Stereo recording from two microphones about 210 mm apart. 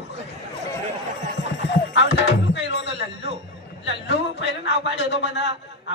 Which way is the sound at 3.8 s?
55° left (ahead or behind).